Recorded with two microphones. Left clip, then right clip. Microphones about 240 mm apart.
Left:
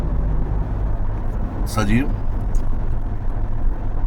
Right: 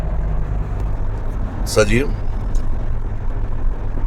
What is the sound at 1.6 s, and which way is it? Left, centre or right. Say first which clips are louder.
Speech: right 7 dB; centre.